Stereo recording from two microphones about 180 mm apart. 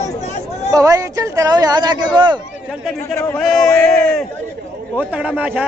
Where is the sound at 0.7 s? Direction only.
20° right (ahead or behind).